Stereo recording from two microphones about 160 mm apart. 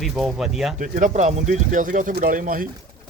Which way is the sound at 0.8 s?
50° right (ahead or behind).